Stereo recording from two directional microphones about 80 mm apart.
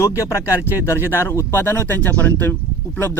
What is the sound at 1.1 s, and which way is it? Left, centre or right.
Speech, left.